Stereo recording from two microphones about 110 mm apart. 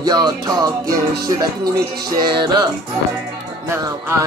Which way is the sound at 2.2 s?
40° right (ahead or behind).